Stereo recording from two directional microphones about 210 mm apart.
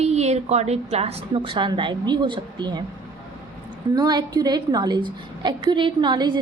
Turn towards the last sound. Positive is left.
turn(degrees=-20)  # may be behind; listen again after turning